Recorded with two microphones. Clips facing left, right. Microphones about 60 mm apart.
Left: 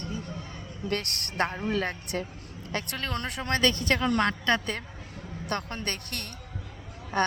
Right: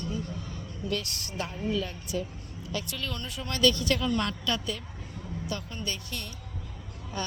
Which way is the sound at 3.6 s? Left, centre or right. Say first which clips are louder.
Right 2 dB; left.